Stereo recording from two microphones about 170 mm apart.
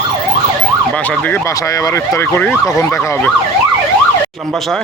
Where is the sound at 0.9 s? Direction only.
10° left (ahead or behind).